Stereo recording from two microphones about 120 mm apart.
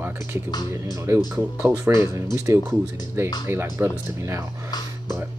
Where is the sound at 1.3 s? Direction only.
30° right (ahead or behind).